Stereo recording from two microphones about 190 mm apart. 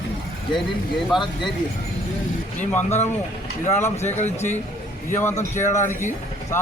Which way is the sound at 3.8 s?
15° left (ahead or behind).